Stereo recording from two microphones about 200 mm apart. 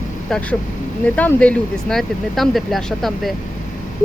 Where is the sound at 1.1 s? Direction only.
5° left (ahead or behind).